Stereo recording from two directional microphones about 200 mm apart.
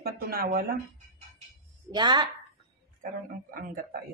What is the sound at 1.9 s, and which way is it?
Speech, 20° right (ahead or behind).